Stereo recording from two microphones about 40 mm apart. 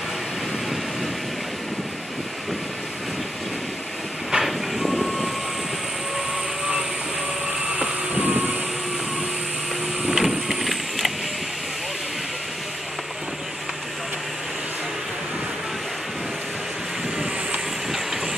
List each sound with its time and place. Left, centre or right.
4.3 s train: centre
7.8 s vehicle: right
10.1 s a sound: centre
17.9 s train: centre